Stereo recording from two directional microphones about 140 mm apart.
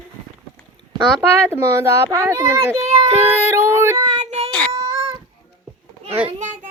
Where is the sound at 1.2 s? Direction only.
15° right (ahead or behind).